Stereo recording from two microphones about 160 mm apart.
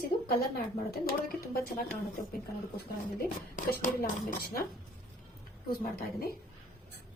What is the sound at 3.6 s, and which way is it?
Speech, 60° left (ahead or behind).